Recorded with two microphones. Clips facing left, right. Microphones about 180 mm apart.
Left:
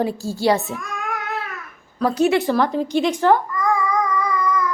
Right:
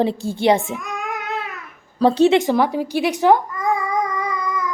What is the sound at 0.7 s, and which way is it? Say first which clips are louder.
Child singing: right 1 dB; 20° right (ahead or behind).